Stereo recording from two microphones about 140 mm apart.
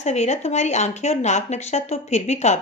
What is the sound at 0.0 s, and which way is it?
Speech, 55° left (ahead or behind).